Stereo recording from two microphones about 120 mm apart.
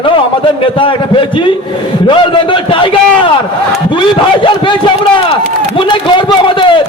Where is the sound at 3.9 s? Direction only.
45° left (ahead or behind).